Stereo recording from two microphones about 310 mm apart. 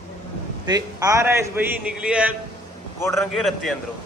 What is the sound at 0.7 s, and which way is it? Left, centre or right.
A man's voice, centre.